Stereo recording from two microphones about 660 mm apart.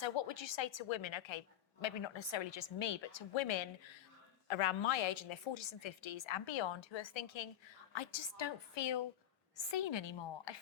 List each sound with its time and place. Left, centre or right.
0.0 s a woman's voice: left